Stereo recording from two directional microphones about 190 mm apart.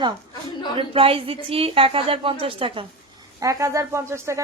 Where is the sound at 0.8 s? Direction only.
30° right (ahead or behind).